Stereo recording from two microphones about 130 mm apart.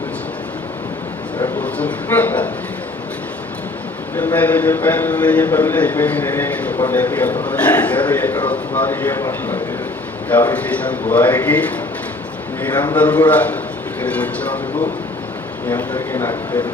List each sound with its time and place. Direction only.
1.6 s a man's voice: 10° left (ahead or behind)
4.4 s a man's voice: 10° left (ahead or behind)
10.2 s a man's voice: 10° left (ahead or behind)
12.7 s a man's voice: 35° left (ahead or behind)
13.0 s a man's voice: 10° left (ahead or behind)
15.8 s speech: 20° left (ahead or behind)